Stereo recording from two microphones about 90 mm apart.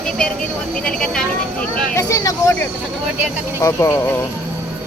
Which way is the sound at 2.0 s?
35° left (ahead or behind).